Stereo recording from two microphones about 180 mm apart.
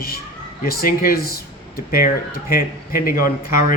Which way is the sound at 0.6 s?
55° left (ahead or behind).